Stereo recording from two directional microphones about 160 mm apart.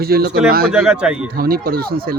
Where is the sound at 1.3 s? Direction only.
70° right (ahead or behind).